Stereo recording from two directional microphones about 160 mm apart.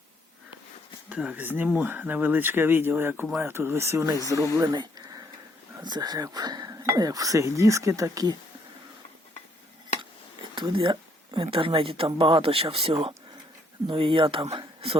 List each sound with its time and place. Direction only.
1.1 s speech: 10° right (ahead or behind)
4.5 s a sound: 25° right (ahead or behind)
5.8 s speech: 25° right (ahead or behind)
10.5 s speech: 30° right (ahead or behind)